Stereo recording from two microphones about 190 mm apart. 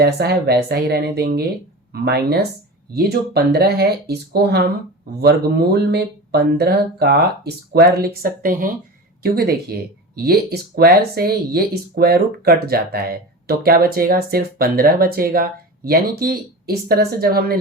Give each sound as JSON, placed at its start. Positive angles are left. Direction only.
{"t": 0.0, "sound": "speech", "side_deg": -55}
{"t": 10.8, "sound": "speech", "side_deg": -55}